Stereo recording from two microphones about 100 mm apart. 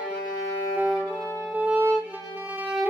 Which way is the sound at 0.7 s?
15° right (ahead or behind).